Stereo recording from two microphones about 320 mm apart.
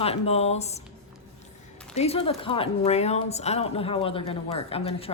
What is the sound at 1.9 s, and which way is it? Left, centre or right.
A woman's voice, centre.